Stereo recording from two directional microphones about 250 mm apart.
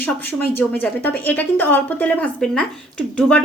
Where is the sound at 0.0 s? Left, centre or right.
Centre.